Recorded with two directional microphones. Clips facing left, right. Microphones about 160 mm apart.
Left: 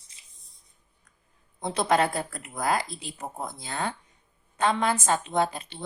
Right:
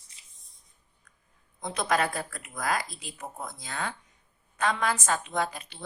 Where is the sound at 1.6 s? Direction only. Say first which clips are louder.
Left 4 dB; 30° left (ahead or behind).